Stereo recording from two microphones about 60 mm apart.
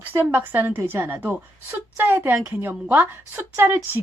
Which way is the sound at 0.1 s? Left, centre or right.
Right.